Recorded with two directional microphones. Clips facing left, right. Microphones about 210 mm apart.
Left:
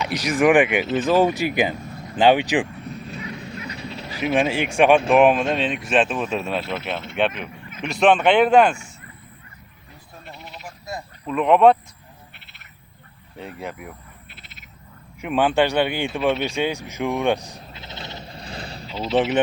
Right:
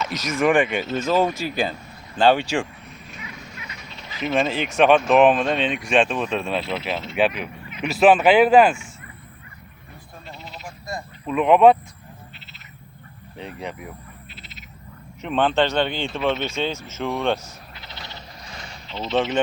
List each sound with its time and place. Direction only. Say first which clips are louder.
0.0 s speech: left 3 dB; 15° left (ahead or behind)
3.1 s dog: left 7 dB; 35° left (ahead or behind)
4.2 s speech: left 2 dB; 10° left (ahead or behind)
10.8 s a sound: right 1 dB; centre (ahead or behind)
13.3 s speech: even; 5° left (ahead or behind)
14.3 s frog: right 4 dB; 55° left (ahead or behind)
15.2 s speech: left 1 dB; 10° left (ahead or behind)
17.5 s bleat: left 4 dB; 25° left (ahead or behind)
18.9 s speech: left 2 dB; 10° left (ahead or behind)